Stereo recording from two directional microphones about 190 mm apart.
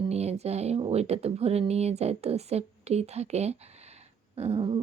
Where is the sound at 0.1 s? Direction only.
35° right (ahead or behind).